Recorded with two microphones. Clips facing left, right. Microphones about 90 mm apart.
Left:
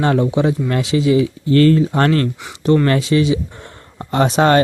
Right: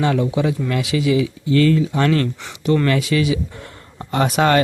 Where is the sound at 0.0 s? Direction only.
35° left (ahead or behind).